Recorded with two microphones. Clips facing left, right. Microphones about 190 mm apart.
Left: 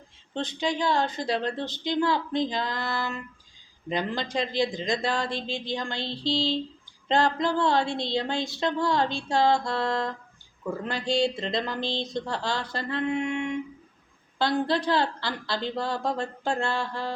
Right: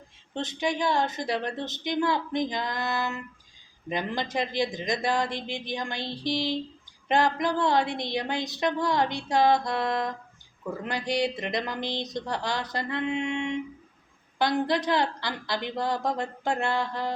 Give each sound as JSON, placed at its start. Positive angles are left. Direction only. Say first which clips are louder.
{"t": 0.3, "sound": "speech", "louder": "even", "side_deg": -20}